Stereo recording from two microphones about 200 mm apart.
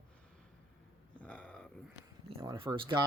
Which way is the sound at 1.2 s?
5° left (ahead or behind).